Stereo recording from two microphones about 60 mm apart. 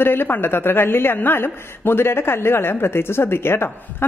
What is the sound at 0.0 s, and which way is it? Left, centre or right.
A woman's voice, left.